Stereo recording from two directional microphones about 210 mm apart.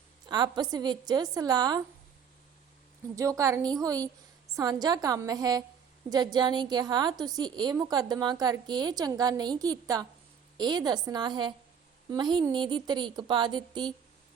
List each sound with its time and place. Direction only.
0.3 s a woman's voice: 20° right (ahead or behind)
3.2 s a woman's voice: 15° right (ahead or behind)